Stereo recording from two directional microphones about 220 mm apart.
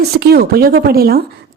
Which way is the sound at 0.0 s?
45° right (ahead or behind).